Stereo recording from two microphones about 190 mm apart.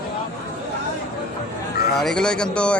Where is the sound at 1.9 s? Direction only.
5° left (ahead or behind).